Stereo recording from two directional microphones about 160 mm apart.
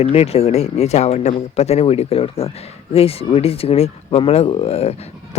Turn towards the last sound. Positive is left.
turn(degrees=40)  # may be behind; listen again after turning